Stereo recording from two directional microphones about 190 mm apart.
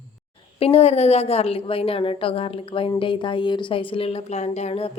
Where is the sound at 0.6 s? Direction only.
30° left (ahead or behind).